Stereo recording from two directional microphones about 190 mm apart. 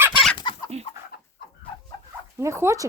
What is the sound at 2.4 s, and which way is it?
Speech, 15° right (ahead or behind).